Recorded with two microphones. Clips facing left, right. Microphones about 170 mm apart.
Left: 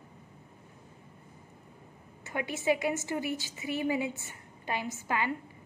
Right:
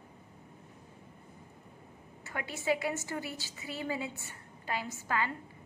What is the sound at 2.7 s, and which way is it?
A woman's voice, 20° left (ahead or behind).